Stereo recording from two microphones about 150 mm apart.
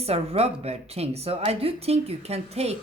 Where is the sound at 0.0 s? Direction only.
40° right (ahead or behind).